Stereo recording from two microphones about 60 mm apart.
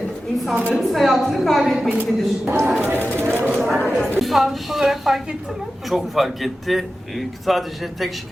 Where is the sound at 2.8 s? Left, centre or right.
Right.